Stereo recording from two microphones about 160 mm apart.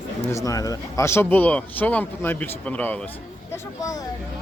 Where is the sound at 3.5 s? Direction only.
20° left (ahead or behind).